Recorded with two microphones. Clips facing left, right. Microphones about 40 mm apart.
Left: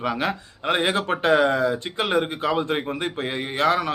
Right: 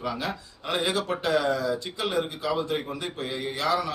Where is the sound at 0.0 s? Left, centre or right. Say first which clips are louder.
Left 6 dB; left.